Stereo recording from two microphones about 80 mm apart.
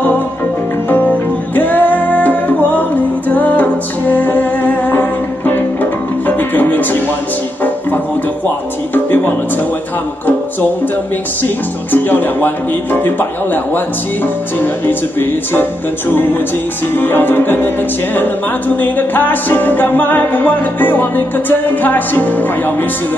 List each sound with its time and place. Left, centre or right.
1.5 s music: left
8.9 s speech: left
11.9 s music: left
16.9 s music: left
18.8 s music: left